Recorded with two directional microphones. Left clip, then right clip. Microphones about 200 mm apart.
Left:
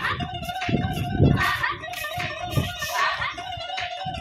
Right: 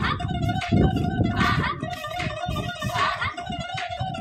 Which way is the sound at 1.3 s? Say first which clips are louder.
Right 1 dB; 20° left (ahead or behind).